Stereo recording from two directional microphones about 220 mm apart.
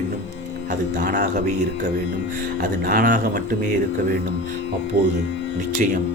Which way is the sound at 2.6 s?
40° right (ahead or behind).